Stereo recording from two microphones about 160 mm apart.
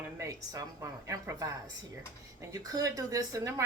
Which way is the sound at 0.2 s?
20° right (ahead or behind).